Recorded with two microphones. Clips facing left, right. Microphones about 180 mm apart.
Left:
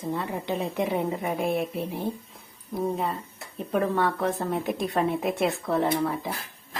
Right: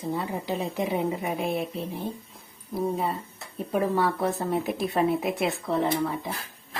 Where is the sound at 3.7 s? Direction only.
5° right (ahead or behind).